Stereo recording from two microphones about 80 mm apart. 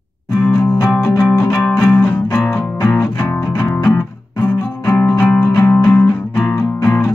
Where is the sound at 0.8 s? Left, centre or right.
Centre.